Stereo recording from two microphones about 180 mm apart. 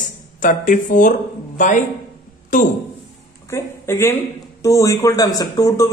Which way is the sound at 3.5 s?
15° left (ahead or behind).